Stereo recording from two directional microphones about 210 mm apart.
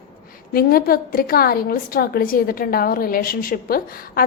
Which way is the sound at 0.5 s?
45° left (ahead or behind).